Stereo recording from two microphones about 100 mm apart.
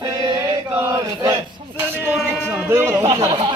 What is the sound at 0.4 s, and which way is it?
Chant, 30° right (ahead or behind).